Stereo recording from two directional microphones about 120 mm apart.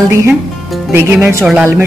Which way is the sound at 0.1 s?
20° right (ahead or behind).